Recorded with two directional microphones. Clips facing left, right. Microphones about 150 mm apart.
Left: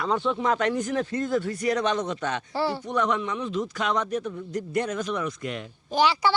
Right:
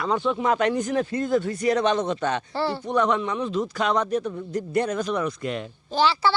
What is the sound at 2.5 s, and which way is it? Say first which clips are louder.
Speech: right 1 dB; 10° left (ahead or behind).